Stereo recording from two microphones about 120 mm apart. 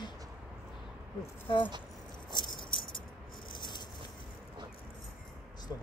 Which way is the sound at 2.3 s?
40° left (ahead or behind).